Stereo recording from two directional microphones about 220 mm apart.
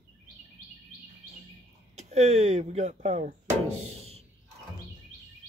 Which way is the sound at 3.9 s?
30° right (ahead or behind).